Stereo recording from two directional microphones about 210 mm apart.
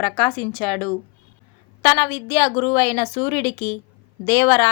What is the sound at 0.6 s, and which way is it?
A woman's voice, 5° left (ahead or behind).